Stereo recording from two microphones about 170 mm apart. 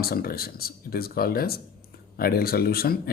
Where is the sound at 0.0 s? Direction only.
60° left (ahead or behind).